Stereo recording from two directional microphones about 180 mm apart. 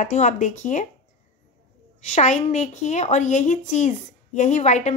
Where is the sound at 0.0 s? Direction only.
45° left (ahead or behind).